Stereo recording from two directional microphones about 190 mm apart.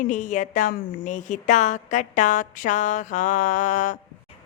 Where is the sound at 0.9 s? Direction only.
45° left (ahead or behind).